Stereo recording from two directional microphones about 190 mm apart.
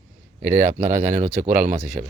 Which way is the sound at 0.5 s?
40° right (ahead or behind).